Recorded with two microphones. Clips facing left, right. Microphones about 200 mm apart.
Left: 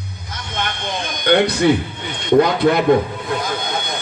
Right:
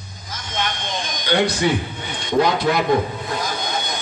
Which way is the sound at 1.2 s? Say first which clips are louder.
Left 5 dB; 55° left (ahead or behind).